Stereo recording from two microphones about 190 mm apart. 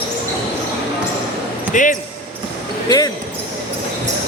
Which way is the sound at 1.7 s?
45° left (ahead or behind).